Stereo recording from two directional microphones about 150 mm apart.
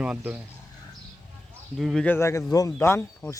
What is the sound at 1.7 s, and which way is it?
Speech, centre (ahead or behind).